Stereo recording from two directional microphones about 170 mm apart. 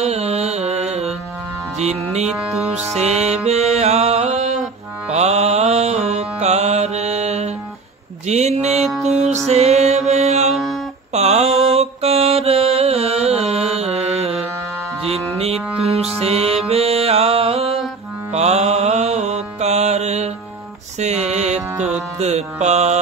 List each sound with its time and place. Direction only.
0.0 s music: 40° right (ahead or behind)
2.2 s music: 5° right (ahead or behind)
2.9 s music: 40° right (ahead or behind)
5.1 s mantra: 40° right (ahead or behind)
8.6 s music: centre (ahead or behind)
9.1 s music: 40° right (ahead or behind)
10.5 s a sound: centre (ahead or behind)
11.1 s mantra: 40° right (ahead or behind)
11.4 s mantra: centre (ahead or behind)
11.7 s mantra: 35° right (ahead or behind)
15.0 s music: 35° right (ahead or behind)
18.3 s mantra: 40° right (ahead or behind)
21.0 s music: 40° right (ahead or behind)